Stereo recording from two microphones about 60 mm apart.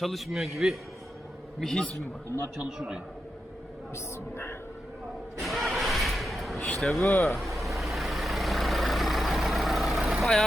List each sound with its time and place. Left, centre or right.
0.0 s a man's voice: centre
2.7 s a man's voice: centre
3.9 s speech: left
5.4 s vehicle: centre
6.7 s a man's voice: centre
7.3 s vehicle: centre